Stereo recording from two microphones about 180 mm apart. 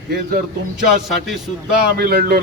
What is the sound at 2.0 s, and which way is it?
Speech, 60° right (ahead or behind).